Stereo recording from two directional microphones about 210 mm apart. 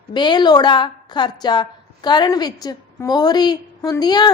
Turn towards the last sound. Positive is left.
turn(degrees=20)  # may be behind; listen again after turning